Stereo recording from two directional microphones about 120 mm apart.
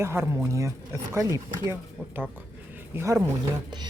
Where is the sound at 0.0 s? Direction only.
20° right (ahead or behind).